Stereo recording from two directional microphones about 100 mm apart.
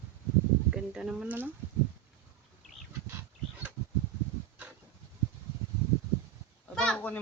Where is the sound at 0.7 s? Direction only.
5° right (ahead or behind).